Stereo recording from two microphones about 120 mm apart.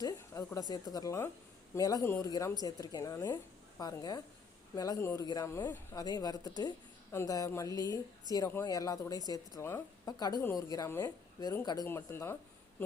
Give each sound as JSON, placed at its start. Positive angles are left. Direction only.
{"t": 0.0, "sound": "a woman's voice", "side_deg": 30}
{"t": 5.2, "sound": "a woman's voice", "side_deg": 35}
{"t": 11.9, "sound": "a woman's voice", "side_deg": 20}